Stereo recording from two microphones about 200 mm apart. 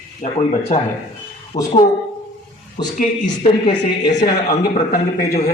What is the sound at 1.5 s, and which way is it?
Speech, 20° left (ahead or behind).